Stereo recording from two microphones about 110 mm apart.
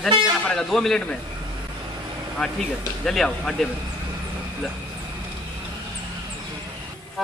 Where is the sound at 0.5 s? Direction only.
5° left (ahead or behind).